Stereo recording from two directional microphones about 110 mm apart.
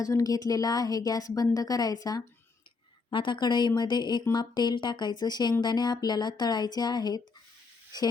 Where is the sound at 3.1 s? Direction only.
45° left (ahead or behind).